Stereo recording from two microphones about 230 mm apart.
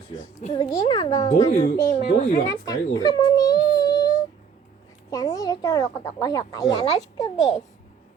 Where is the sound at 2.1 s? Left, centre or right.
Left.